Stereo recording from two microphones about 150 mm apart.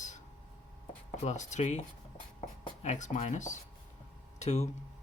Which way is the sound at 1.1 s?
50° left (ahead or behind).